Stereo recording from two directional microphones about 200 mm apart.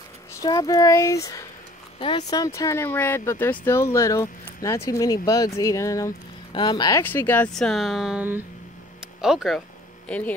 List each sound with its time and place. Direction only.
0.4 s speech: 20° left (ahead or behind)